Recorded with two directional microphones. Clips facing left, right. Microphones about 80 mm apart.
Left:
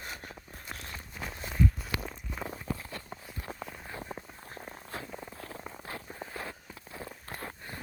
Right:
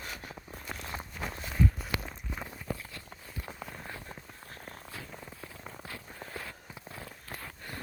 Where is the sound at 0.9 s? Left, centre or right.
Right.